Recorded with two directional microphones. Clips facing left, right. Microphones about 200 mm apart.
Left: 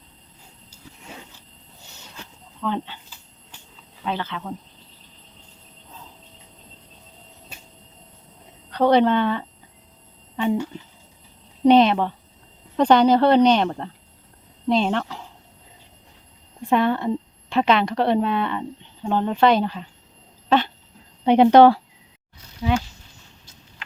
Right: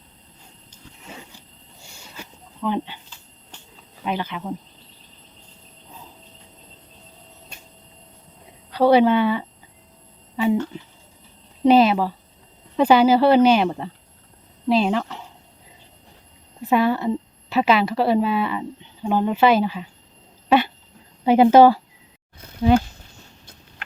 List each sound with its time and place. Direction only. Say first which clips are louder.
1.8 s a sound: right 2 dB; 10° right (ahead or behind)
4.0 s speech: right 2 dB; 15° right (ahead or behind)
7.5 s train: left 2 dB; 5° left (ahead or behind)
8.7 s speech: right 2 dB; 5° right (ahead or behind)
10.3 s a sound: right 2 dB; 5° right (ahead or behind)
11.6 s speech: even; 5° right (ahead or behind)
16.6 s a woman's voice: right 1 dB; 5° right (ahead or behind)
21.2 s speech: even; 5° right (ahead or behind)
22.4 s a sound: right 6 dB; 55° right (ahead or behind)